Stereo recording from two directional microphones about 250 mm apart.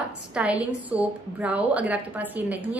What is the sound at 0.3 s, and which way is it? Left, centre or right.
A woman's voice, centre.